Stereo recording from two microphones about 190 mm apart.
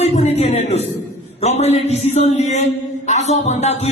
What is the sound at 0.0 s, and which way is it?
Music, 35° left (ahead or behind).